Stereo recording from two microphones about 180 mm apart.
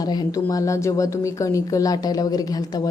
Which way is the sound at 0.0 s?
20° left (ahead or behind).